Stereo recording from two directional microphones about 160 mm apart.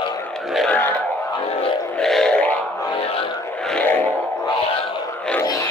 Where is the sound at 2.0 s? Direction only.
5° left (ahead or behind).